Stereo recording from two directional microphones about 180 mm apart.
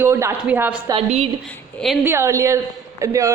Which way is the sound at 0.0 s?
15° right (ahead or behind).